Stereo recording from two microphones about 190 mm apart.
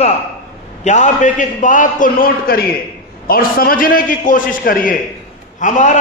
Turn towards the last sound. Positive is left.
turn(degrees=40)  # may be behind; listen again after turning